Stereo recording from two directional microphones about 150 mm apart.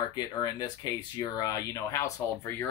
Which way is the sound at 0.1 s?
30° left (ahead or behind).